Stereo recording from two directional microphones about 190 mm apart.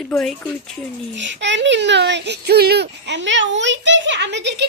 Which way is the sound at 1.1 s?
70° right (ahead or behind).